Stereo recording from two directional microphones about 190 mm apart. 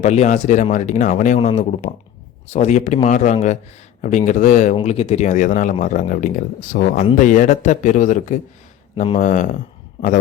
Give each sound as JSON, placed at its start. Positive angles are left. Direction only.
{"t": 0.0, "sound": "speech", "side_deg": 35}